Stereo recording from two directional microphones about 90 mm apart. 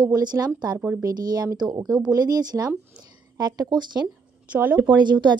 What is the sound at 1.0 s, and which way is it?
A woman's voice, 45° right (ahead or behind).